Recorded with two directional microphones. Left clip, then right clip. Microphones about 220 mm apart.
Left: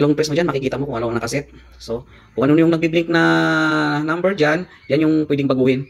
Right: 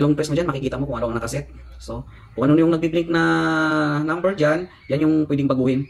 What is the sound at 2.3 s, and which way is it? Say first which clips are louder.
Speech: left 2 dB; 20° left (ahead or behind).